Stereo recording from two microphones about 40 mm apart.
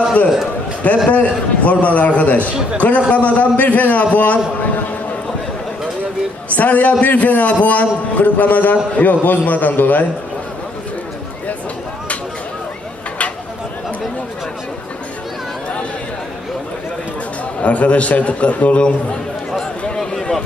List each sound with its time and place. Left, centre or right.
0.8 s a man's voice: left
6.5 s a man's voice: left
17.6 s a man's voice: left
20.0 s run: centre